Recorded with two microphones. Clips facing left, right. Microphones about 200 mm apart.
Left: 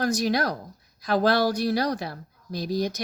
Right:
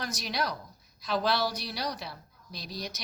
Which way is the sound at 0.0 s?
50° left (ahead or behind).